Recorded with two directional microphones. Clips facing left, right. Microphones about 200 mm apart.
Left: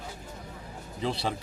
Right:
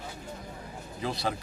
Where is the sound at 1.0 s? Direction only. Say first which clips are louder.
Left 2 dB; 30° left (ahead or behind).